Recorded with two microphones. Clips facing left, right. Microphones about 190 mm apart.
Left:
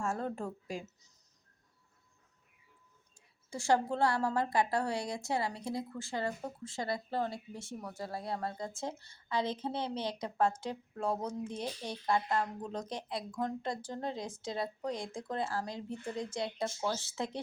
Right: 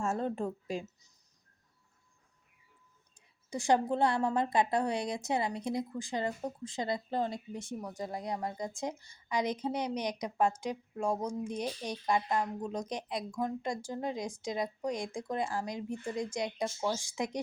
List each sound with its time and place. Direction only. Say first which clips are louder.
0.0 s a woman's voice: right 3 dB; 20° right (ahead or behind)
3.2 s a woman's voice: right 4 dB; 20° right (ahead or behind)